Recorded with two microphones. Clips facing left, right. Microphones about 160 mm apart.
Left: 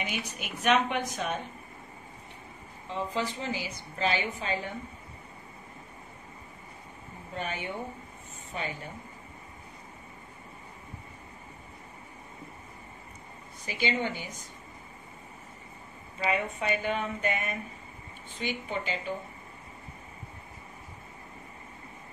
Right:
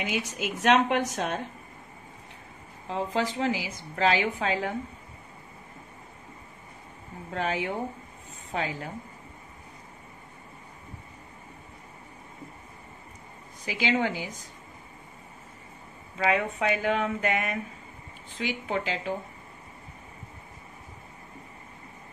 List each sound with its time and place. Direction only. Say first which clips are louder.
0.0 s a woman's voice: right 5 dB; 90° right
2.9 s a woman's voice: right 4 dB; 90° right
7.3 s a woman's voice: right 6 dB; 90° right
13.7 s a woman's voice: right 4 dB; 90° right
16.2 s a woman's voice: right 4 dB; 90° right